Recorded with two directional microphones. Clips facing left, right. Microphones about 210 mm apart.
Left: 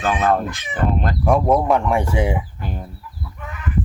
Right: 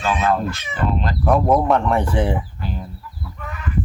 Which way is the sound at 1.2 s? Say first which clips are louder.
Even; centre (ahead or behind).